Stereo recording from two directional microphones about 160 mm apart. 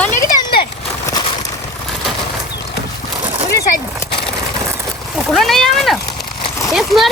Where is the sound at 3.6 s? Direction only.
75° left (ahead or behind).